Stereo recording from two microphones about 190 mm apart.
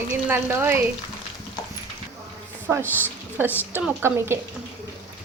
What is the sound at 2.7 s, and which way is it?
A woman's voice, 5° right (ahead or behind).